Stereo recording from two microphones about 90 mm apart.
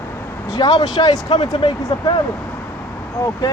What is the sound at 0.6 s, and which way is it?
Speech, 45° left (ahead or behind).